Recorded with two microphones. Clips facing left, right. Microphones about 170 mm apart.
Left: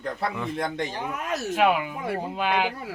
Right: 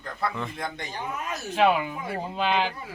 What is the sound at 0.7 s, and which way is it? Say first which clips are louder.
Speech: left 4 dB; 75° left (ahead or behind).